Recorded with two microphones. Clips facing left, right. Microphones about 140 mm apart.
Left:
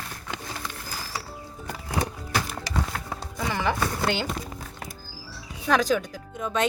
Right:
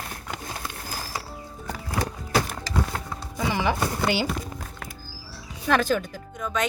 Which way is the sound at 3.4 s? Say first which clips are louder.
Right 2 dB; 15° right (ahead or behind).